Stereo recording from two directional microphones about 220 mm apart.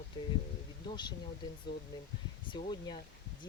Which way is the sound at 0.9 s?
20° left (ahead or behind).